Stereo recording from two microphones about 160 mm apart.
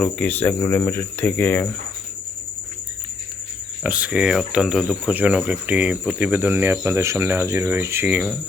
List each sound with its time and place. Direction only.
0.0 s speech: 10° left (ahead or behind)
3.8 s speech: 5° right (ahead or behind)